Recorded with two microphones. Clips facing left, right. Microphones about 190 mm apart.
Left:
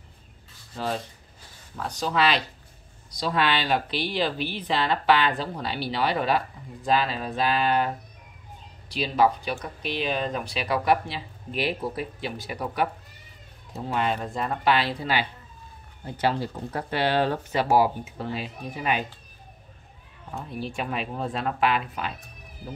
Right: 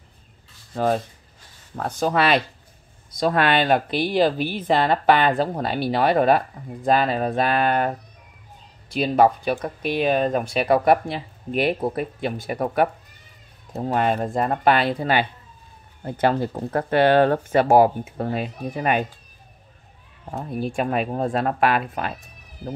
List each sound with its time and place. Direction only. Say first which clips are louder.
0.7 s speech: right 8 dB; 50° right (ahead or behind)
20.2 s speech: right 6 dB; 45° right (ahead or behind)